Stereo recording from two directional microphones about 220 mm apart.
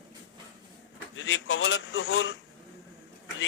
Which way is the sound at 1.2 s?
60° left (ahead or behind).